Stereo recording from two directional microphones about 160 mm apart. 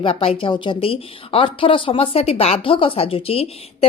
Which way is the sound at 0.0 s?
35° left (ahead or behind).